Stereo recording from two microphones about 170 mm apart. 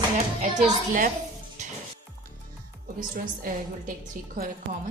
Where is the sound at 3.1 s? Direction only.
55° right (ahead or behind).